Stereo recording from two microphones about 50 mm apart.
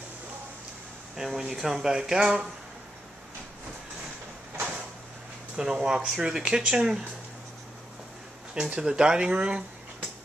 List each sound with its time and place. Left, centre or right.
1.1 s speech: centre
5.6 s speech: centre
8.6 s speech: right